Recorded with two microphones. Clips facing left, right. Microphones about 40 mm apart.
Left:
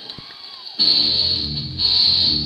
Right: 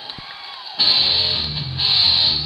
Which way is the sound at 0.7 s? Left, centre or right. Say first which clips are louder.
Right 1 dB; right.